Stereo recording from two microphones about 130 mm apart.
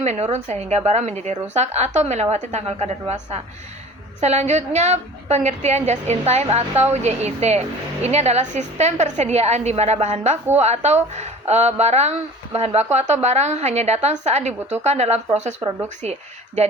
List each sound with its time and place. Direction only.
0.0 s a woman's voice: 60° right (ahead or behind)